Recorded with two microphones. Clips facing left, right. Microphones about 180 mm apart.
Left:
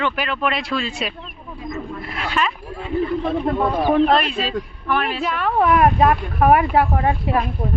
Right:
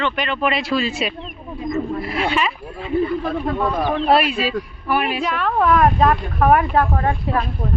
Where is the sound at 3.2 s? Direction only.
25° left (ahead or behind).